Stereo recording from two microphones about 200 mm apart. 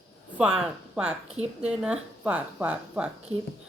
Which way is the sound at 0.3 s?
5° right (ahead or behind).